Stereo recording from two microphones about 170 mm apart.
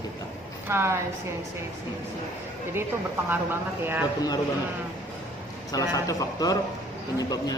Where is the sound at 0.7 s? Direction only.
15° right (ahead or behind).